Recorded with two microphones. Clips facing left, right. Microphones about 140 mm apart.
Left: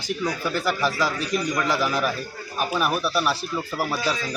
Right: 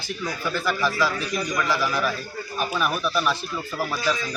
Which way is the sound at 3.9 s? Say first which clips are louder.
Right 2 dB; 35° left (ahead or behind).